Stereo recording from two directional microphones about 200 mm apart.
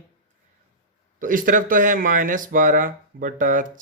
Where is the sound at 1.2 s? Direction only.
45° right (ahead or behind).